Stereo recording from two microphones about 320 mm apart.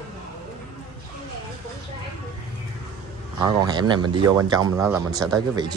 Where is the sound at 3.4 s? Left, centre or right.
Centre.